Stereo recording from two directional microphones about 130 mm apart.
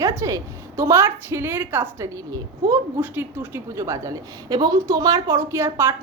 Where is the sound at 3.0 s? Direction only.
15° right (ahead or behind).